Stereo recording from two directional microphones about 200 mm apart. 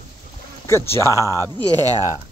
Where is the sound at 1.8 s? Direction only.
20° right (ahead or behind).